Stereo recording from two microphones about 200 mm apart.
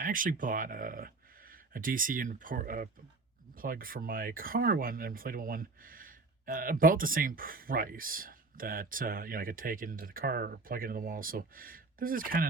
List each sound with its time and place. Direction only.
0.0 s speech: 40° right (ahead or behind)